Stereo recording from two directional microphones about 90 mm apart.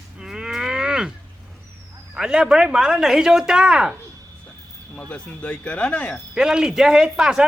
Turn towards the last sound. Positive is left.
turn(degrees=-5)  # may be behind; listen again after turning